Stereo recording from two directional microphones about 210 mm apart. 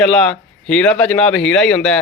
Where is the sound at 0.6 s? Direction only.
5° left (ahead or behind).